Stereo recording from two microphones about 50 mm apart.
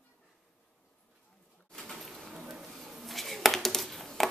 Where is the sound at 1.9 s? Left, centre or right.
Centre.